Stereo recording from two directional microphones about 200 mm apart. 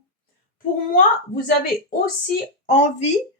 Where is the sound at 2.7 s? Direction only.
35° left (ahead or behind).